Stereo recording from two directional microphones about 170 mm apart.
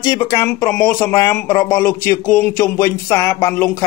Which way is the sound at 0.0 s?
15° left (ahead or behind).